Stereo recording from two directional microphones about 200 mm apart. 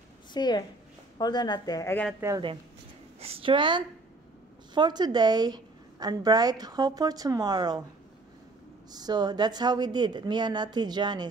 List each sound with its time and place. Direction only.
0.3 s a woman's voice: 20° left (ahead or behind)
2.1 s speech: 15° right (ahead or behind)
3.2 s a woman's voice: 30° right (ahead or behind)
8.9 s a woman's voice: 20° right (ahead or behind)